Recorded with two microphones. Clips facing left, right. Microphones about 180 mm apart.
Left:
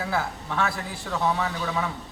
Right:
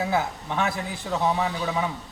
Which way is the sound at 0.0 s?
20° right (ahead or behind).